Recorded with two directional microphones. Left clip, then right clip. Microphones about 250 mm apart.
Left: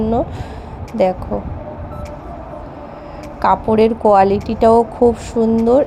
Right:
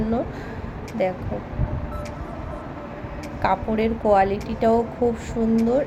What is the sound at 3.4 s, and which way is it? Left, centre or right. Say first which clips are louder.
Speech: left 9 dB; left.